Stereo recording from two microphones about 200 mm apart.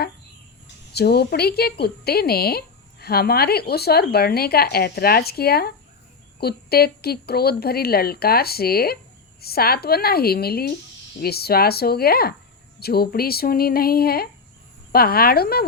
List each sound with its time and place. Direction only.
0.9 s speech: 55° left (ahead or behind)